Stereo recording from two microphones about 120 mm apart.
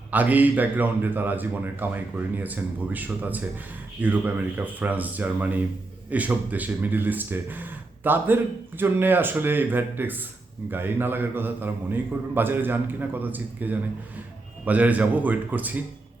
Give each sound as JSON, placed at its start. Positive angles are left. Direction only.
{"t": 0.1, "sound": "a man's voice", "side_deg": -15}